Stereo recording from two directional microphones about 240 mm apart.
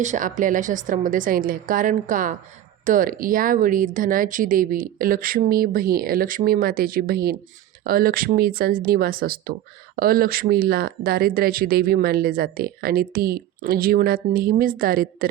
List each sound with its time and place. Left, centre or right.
0.0 s speech: right